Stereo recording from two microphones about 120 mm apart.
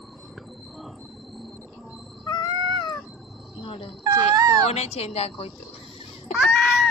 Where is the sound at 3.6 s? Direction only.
50° left (ahead or behind).